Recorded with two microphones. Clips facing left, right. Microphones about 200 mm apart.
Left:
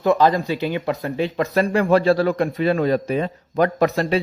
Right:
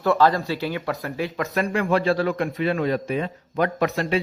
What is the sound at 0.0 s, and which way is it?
Speech, 20° left (ahead or behind).